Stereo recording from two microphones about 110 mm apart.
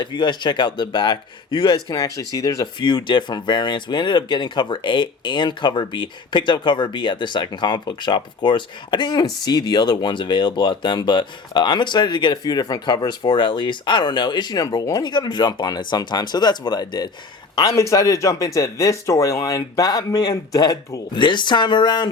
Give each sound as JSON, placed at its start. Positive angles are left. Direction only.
{"t": 0.0, "sound": "speech", "side_deg": 40}
{"t": 2.8, "sound": "speech", "side_deg": 45}
{"t": 17.7, "sound": "speech", "side_deg": 30}